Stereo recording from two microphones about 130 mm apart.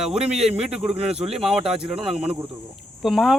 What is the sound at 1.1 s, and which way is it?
Speech, 50° right (ahead or behind).